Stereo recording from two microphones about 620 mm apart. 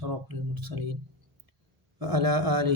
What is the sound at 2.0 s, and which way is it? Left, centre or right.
Speech, right.